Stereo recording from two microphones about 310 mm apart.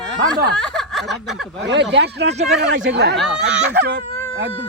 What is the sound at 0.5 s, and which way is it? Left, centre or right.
Speech, centre.